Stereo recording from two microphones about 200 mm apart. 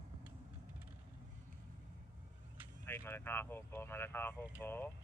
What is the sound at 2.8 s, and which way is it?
Speech, 10° left (ahead or behind).